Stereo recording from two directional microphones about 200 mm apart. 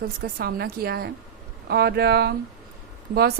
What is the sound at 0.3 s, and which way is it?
A woman's voice, 50° right (ahead or behind).